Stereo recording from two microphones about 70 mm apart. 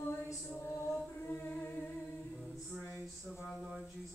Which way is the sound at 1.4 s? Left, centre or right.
Left.